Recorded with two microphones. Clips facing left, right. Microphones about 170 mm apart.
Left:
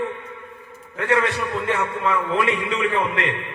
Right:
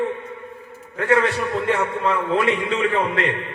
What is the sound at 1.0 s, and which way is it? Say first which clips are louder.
A man's voice: right 2 dB; 35° right (ahead or behind).